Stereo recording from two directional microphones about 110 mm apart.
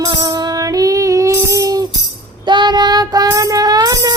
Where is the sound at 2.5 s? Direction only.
45° right (ahead or behind).